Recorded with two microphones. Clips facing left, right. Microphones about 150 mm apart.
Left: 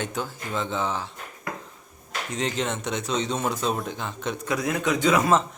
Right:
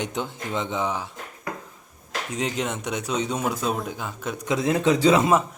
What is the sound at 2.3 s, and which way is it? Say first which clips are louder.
Speech: even; 10° right (ahead or behind).